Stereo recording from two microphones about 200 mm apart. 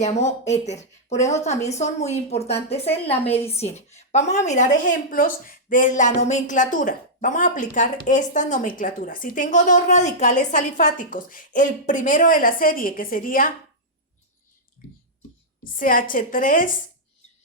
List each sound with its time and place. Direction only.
0.0 s a woman's voice: 35° left (ahead or behind)
15.8 s a woman's voice: 45° left (ahead or behind)